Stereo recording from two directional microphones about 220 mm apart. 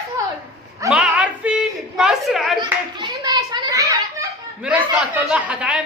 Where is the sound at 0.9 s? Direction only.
5° right (ahead or behind).